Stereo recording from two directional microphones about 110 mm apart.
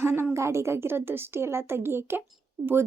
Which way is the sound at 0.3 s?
25° right (ahead or behind).